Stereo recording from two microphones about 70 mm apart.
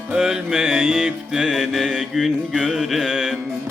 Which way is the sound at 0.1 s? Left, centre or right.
Centre.